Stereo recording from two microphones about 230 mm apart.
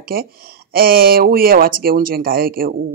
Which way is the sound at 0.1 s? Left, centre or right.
Right.